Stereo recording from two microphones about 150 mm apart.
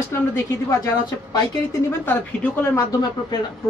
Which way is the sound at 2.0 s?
15° left (ahead or behind).